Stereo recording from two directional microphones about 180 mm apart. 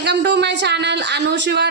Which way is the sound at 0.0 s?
70° right (ahead or behind).